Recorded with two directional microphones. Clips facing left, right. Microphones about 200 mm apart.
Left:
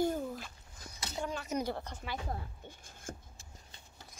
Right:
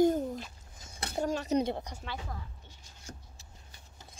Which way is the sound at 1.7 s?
15° right (ahead or behind).